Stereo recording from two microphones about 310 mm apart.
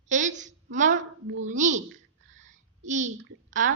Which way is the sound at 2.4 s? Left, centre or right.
Right.